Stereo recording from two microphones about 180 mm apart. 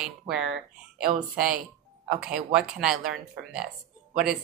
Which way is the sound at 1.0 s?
50° right (ahead or behind).